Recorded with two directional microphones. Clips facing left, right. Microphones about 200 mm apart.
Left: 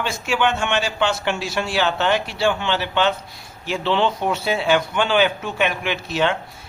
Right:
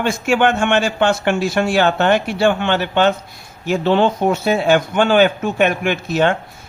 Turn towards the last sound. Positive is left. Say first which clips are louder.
# right 5 dB
turn(degrees=-50)  # may be behind; listen again after turning